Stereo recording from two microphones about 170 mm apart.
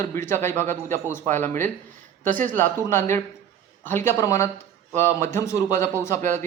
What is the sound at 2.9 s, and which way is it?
A man's voice, 15° left (ahead or behind).